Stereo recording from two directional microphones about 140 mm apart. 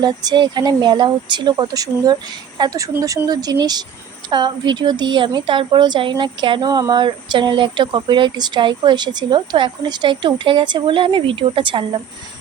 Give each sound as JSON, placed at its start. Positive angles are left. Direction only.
{"t": 0.0, "sound": "a woman's voice", "side_deg": -30}